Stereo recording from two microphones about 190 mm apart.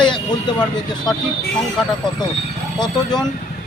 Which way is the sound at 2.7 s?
20° left (ahead or behind).